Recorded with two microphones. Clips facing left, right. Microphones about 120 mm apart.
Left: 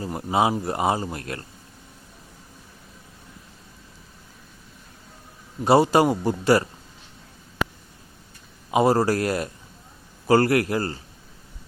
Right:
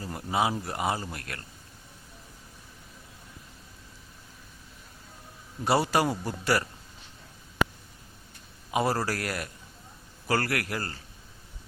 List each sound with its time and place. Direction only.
0.0 s speech: 25° left (ahead or behind)
5.6 s speech: 25° left (ahead or behind)
8.7 s speech: 20° left (ahead or behind)